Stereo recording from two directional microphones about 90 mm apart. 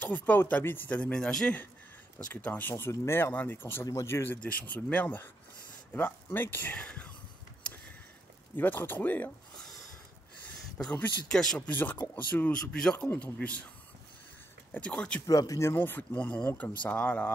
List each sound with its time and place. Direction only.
0.0 s speech: 20° left (ahead or behind)
2.4 s speech: 20° left (ahead or behind)
2.7 s speech: 30° left (ahead or behind)
3.8 s speech: 35° left (ahead or behind); by 7.1 s 15° left (ahead or behind)
8.5 s speech: 20° left (ahead or behind)
10.8 s speech: 10° left (ahead or behind)
11.6 s speech: 20° left (ahead or behind)
14.7 s speech: 15° left (ahead or behind)
15.2 s speech: 40° left (ahead or behind)
15.7 s speech: 25° left (ahead or behind)